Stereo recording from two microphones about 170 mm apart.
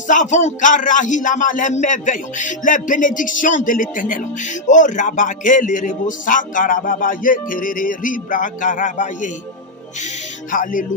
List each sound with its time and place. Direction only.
0.1 s a man's voice: 45° left (ahead or behind)
10.5 s a man's voice: 50° left (ahead or behind)